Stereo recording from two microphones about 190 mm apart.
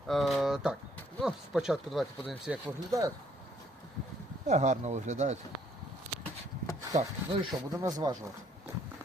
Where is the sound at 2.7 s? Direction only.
20° right (ahead or behind).